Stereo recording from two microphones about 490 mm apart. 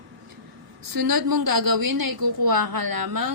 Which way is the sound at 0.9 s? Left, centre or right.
Right.